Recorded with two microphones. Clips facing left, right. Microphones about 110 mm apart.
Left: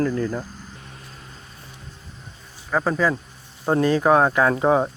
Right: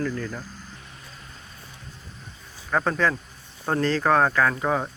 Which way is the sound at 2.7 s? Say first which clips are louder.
Left 2 dB; 5° left (ahead or behind).